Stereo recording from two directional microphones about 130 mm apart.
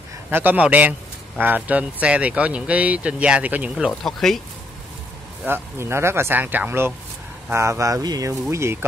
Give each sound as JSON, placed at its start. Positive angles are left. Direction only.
{"t": 0.3, "sound": "speech", "side_deg": -15}
{"t": 4.0, "sound": "speech", "side_deg": 0}
{"t": 5.4, "sound": "speech", "side_deg": -20}